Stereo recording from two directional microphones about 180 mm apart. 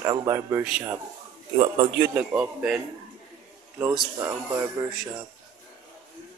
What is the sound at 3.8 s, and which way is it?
Speech, 10° right (ahead or behind).